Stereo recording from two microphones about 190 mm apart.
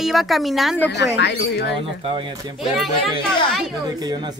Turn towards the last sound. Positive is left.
turn(degrees=-20)  # may be behind; listen again after turning